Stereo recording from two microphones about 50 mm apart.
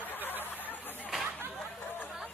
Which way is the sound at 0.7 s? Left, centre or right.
Left.